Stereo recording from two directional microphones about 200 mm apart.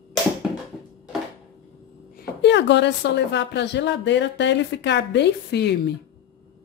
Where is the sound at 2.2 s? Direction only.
60° left (ahead or behind).